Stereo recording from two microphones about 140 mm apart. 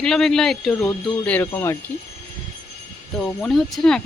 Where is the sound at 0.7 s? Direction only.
15° left (ahead or behind).